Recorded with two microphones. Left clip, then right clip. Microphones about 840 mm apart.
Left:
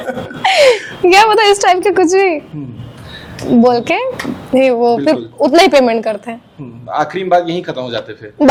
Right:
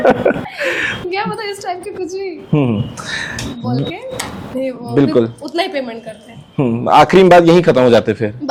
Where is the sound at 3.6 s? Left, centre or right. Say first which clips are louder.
Left 14 dB; left.